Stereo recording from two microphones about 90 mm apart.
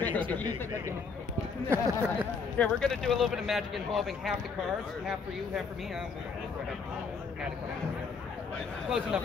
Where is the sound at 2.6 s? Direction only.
5° left (ahead or behind).